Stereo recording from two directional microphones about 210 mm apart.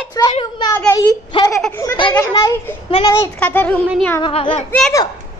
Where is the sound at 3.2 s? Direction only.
10° left (ahead or behind).